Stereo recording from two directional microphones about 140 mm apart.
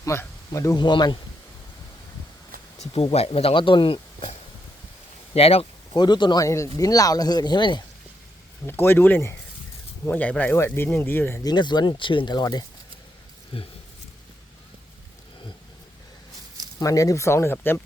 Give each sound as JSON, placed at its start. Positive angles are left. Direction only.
{"t": 0.0, "sound": "speech", "side_deg": 20}
{"t": 2.7, "sound": "speech", "side_deg": 50}
{"t": 5.3, "sound": "a sound", "side_deg": 45}
{"t": 6.0, "sound": "speech", "side_deg": 30}
{"t": 8.6, "sound": "speech", "side_deg": 15}
{"t": 11.4, "sound": "speech", "side_deg": 30}
{"t": 13.5, "sound": "speech", "side_deg": 45}
{"t": 16.8, "sound": "speech", "side_deg": 25}